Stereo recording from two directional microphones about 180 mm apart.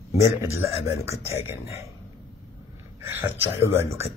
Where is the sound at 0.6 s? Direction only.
15° right (ahead or behind).